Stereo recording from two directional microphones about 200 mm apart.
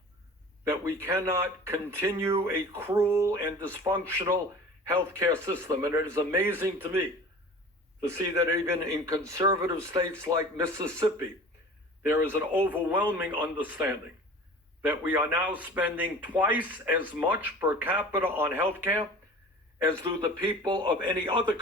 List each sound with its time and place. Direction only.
0.6 s speech: 15° right (ahead or behind)
20.1 s a man's voice: 20° right (ahead or behind)